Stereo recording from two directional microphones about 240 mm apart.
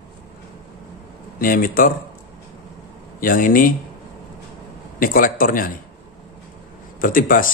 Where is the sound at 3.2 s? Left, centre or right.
Left.